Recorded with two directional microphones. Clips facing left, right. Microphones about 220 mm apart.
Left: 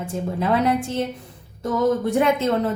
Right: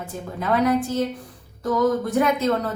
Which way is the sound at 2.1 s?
25° left (ahead or behind).